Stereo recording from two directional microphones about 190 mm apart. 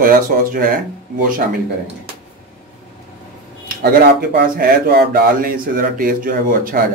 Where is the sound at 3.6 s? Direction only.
55° right (ahead or behind).